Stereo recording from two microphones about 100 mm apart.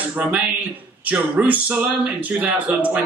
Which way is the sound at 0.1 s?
15° right (ahead or behind).